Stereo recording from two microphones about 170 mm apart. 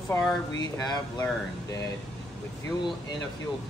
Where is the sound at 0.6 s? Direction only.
25° left (ahead or behind).